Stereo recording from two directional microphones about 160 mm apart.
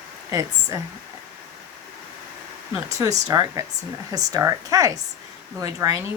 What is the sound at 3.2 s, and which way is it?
A woman's voice, 20° right (ahead or behind).